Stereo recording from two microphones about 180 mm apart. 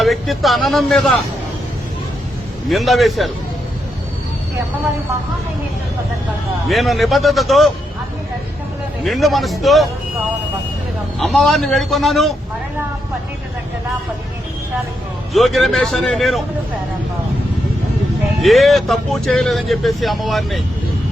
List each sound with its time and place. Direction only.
0.0 s speech: centre (ahead or behind)
2.6 s speech: centre (ahead or behind)
6.7 s speech: centre (ahead or behind)
9.0 s speech: centre (ahead or behind)
11.2 s speech: centre (ahead or behind)
15.3 s speech: centre (ahead or behind)
18.4 s speech: centre (ahead or behind)